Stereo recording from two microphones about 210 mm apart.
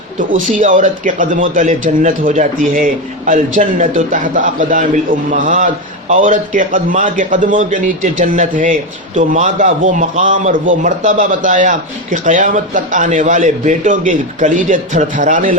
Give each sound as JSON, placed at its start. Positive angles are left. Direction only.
{"t": 0.2, "sound": "a man's voice", "side_deg": -40}